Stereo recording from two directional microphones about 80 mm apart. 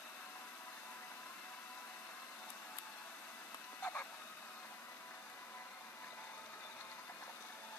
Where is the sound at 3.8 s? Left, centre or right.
Centre.